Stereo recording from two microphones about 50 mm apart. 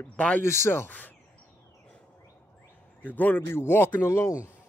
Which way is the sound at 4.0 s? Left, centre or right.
Left.